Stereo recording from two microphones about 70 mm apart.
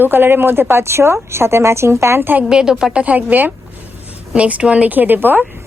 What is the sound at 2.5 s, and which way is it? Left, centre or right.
A woman's voice, centre.